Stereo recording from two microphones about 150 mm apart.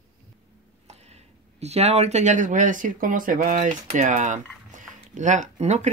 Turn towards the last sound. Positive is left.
turn(degrees=-50)  # may be behind; listen again after turning